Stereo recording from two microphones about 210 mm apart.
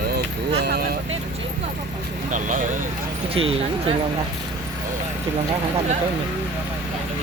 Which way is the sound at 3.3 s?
25° right (ahead or behind).